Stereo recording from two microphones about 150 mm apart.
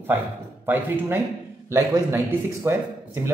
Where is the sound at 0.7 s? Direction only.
10° right (ahead or behind).